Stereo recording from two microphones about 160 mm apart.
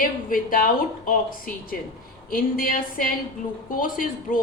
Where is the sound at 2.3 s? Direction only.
65° left (ahead or behind).